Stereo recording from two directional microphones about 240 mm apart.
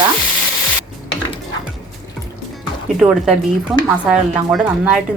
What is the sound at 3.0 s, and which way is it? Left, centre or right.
Speech, centre.